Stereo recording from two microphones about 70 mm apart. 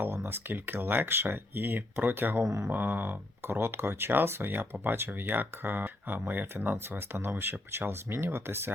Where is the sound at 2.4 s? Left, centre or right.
Right.